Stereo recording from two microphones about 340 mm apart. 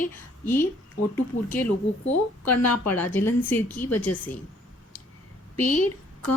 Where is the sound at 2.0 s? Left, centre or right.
Left.